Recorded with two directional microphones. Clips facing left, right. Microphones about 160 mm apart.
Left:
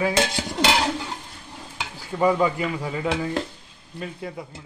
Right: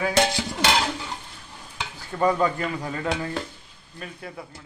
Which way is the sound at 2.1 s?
15° left (ahead or behind).